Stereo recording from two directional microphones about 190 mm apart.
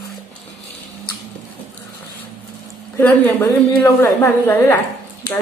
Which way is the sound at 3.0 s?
10° left (ahead or behind).